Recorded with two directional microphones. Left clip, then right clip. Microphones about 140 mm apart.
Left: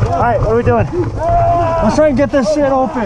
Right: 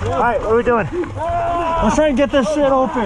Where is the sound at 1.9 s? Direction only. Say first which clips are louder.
Left 2 dB; 10° right (ahead or behind).